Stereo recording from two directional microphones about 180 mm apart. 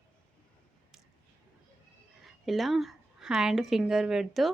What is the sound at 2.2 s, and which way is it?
A woman's voice, centre (ahead or behind).